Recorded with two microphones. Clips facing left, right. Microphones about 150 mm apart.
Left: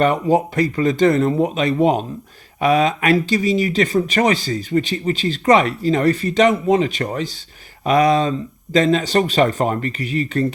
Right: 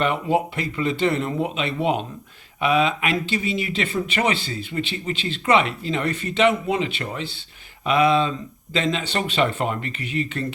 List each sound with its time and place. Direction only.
0.0 s speech: 40° left (ahead or behind)